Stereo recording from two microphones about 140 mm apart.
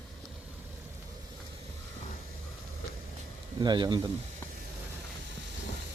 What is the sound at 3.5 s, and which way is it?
Speech, 30° right (ahead or behind).